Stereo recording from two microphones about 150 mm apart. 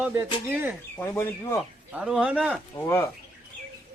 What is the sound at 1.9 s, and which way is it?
Speech, 5° right (ahead or behind).